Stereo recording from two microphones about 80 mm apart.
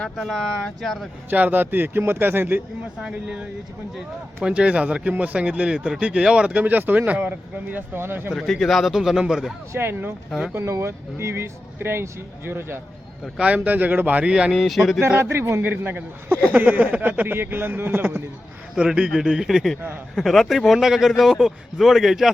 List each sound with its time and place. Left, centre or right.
0.2 s a man's voice: centre
1.3 s a man's voice: right
3.0 s speech: centre
4.4 s speech: centre; by 8.3 s right
8.3 s a man's voice: centre
9.7 s a man's voice: right
13.4 s a man's voice: centre
14.5 s a man's voice: centre
15.0 s a man's voice: right
18.7 s a man's voice: centre